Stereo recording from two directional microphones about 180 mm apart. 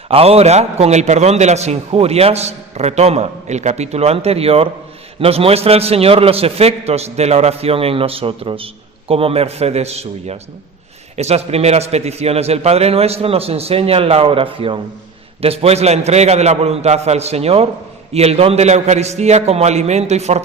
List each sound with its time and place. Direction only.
0.1 s a man's voice: 35° right (ahead or behind)